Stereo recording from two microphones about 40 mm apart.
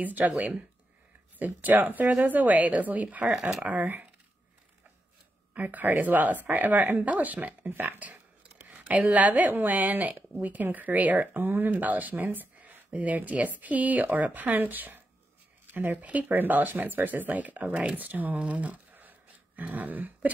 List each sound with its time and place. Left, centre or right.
0.0 s speech: right
1.4 s speech: right
3.3 s speech: centre
3.6 s speech: right
5.5 s speech: right
12.3 s a sound: right
12.9 s speech: right
16.0 s speech: right
18.4 s a sound: right